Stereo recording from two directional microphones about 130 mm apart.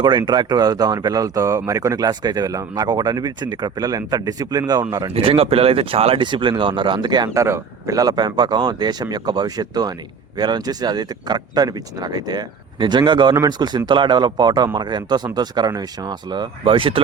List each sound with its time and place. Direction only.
0.0 s speech: 35° right (ahead or behind)
5.1 s speech: 45° right (ahead or behind)
7.3 s speech: 20° right (ahead or behind); by 17.0 s 40° right (ahead or behind)